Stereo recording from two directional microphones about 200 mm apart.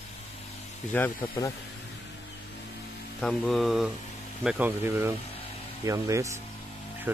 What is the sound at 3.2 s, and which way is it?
Mantra, centre (ahead or behind).